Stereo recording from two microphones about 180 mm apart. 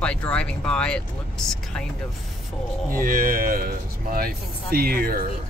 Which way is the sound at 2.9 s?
50° right (ahead or behind).